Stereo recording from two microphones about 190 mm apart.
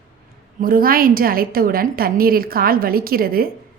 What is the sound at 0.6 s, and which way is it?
A woman's voice, 50° right (ahead or behind).